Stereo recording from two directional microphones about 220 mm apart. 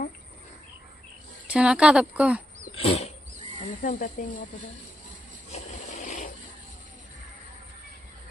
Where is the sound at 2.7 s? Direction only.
30° left (ahead or behind).